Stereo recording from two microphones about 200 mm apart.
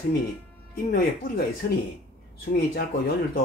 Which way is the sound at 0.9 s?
50° left (ahead or behind).